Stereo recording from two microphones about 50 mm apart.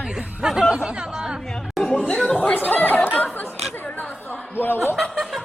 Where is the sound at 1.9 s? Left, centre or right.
Left.